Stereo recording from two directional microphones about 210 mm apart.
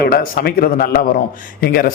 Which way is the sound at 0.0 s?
45° left (ahead or behind).